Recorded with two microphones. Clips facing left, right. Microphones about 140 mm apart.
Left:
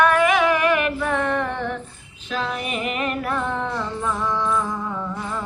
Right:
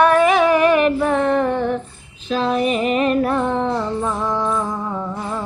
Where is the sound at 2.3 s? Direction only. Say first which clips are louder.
Right 8 dB; 30° right (ahead or behind).